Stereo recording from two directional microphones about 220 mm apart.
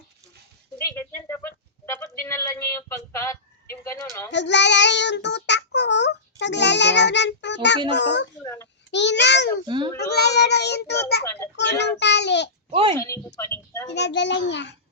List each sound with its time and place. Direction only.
0.8 s speech: 10° left (ahead or behind)
4.3 s child singing: 55° left (ahead or behind)
9.6 s a child's voice: 20° right (ahead or behind)
10.3 s child singing: 50° left (ahead or behind)
12.7 s a child's voice: 25° right (ahead or behind)
13.0 s speech: 10° left (ahead or behind)
13.9 s child singing: 50° left (ahead or behind)